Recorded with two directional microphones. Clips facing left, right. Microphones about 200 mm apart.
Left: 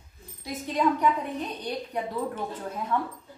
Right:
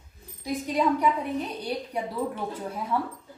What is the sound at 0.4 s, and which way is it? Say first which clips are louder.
A woman's voice: right 1 dB; 10° right (ahead or behind).